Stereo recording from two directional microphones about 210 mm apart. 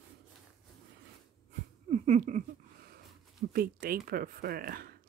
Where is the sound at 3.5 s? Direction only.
45° right (ahead or behind).